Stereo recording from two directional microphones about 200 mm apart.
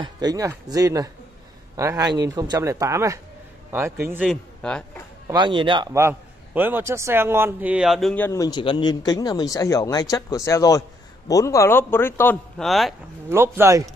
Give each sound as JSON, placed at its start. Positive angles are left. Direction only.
{"t": 0.0, "sound": "speech", "side_deg": -20}
{"t": 4.3, "sound": "a man's voice", "side_deg": 5}
{"t": 5.3, "sound": "a man's voice", "side_deg": -25}
{"t": 13.3, "sound": "speech", "side_deg": -10}